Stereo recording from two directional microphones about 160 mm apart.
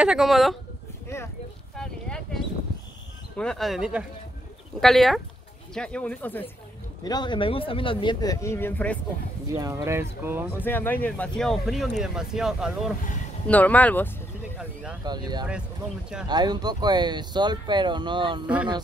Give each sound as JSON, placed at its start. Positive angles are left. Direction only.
{"t": 0.0, "sound": "speech", "side_deg": -5}
{"t": 1.0, "sound": "a sound", "side_deg": 15}
{"t": 1.8, "sound": "a sound", "side_deg": 5}
{"t": 3.3, "sound": "speech", "side_deg": 5}
{"t": 7.1, "sound": "speech", "side_deg": 30}
{"t": 9.5, "sound": "speech", "side_deg": -20}
{"t": 10.6, "sound": "speech", "side_deg": 10}
{"t": 13.5, "sound": "speech", "side_deg": 10}
{"t": 14.6, "sound": "speech", "side_deg": -10}
{"t": 15.0, "sound": "speech", "side_deg": -25}